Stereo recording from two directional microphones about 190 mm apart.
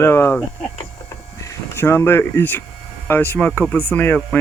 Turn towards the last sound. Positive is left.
turn(degrees=10)  # may be behind; listen again after turning